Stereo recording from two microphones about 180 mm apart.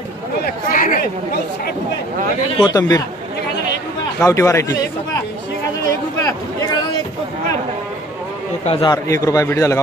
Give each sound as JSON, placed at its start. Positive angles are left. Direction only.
{"t": 0.7, "sound": "speech", "side_deg": 50}
{"t": 2.6, "sound": "speech", "side_deg": 20}
{"t": 4.2, "sound": "a man's voice", "side_deg": 15}
{"t": 5.9, "sound": "a sound", "side_deg": 20}
{"t": 8.6, "sound": "a man's voice", "side_deg": 25}